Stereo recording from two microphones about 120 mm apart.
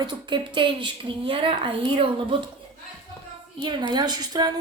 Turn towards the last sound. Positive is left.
turn(degrees=-35)  # may be behind; listen again after turning